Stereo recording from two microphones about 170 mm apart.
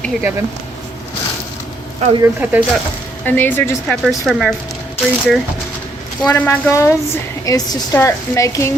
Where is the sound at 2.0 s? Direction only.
35° right (ahead or behind).